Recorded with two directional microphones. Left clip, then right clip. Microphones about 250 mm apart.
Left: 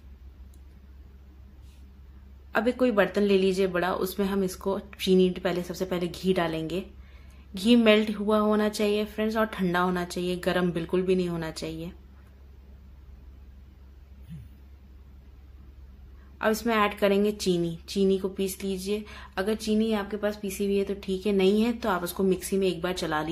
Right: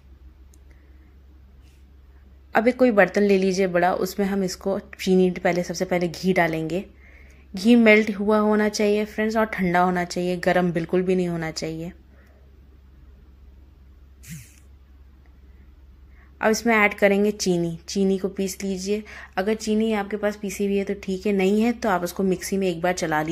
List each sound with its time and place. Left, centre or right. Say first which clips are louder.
2.5 s a woman's voice: right 6 dB; right
16.3 s a woman's voice: right 5 dB; centre